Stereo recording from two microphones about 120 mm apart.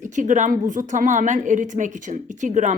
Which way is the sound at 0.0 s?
90° right.